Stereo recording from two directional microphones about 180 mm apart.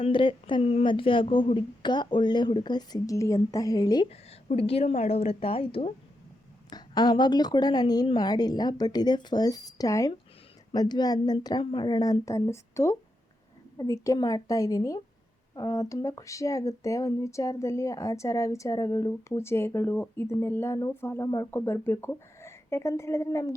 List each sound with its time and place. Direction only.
0.0 s speech: 30° left (ahead or behind)
4.1 s a woman's voice: 35° left (ahead or behind); by 23.6 s 15° left (ahead or behind)